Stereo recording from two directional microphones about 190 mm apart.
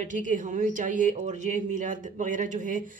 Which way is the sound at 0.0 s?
40° right (ahead or behind).